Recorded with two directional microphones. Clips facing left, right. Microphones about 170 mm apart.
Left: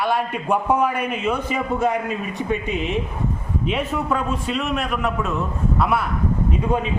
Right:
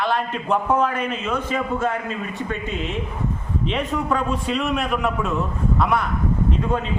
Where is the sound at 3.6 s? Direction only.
5° left (ahead or behind).